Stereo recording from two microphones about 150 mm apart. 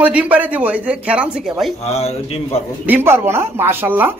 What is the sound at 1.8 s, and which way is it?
Speech, 45° left (ahead or behind).